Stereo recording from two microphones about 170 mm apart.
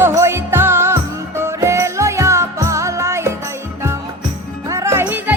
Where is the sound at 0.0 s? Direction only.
15° right (ahead or behind).